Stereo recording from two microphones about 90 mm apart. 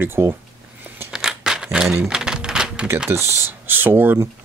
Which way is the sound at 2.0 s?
10° right (ahead or behind).